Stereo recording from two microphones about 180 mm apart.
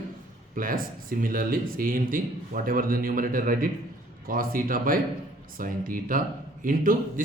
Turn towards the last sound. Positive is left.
turn(degrees=-50)  # may be behind; listen again after turning